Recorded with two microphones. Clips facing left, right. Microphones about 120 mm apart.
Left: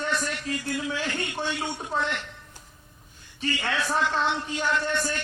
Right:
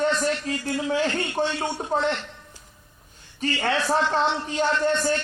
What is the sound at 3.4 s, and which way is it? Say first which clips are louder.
Speech: right 4 dB; 40° right (ahead or behind).